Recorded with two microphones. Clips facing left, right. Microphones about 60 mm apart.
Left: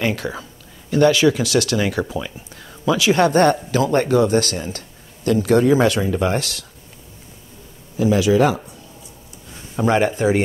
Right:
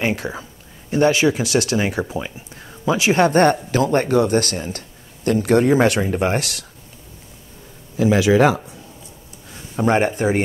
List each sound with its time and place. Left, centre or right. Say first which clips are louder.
0.0 s speech: even; right
8.0 s speech: right 1 dB; right
9.8 s speech: even; right